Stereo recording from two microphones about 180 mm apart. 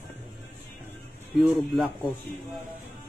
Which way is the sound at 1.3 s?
Centre (ahead or behind).